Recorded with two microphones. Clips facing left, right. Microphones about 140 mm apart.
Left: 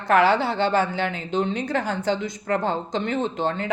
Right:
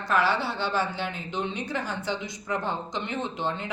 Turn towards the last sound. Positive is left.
turn(degrees=50)  # may be behind; listen again after turning